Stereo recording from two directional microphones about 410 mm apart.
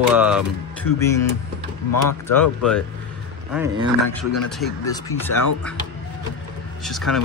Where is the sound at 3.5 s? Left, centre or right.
Centre.